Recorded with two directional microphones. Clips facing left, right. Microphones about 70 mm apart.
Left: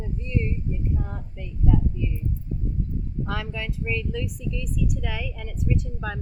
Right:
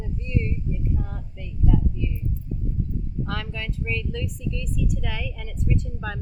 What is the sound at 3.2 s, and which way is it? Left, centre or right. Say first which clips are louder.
A woman's voice: left 1 dB; centre.